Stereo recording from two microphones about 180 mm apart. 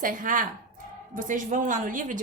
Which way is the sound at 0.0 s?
50° right (ahead or behind).